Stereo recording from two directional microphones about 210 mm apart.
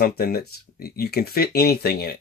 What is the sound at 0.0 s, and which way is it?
Speech, 45° left (ahead or behind).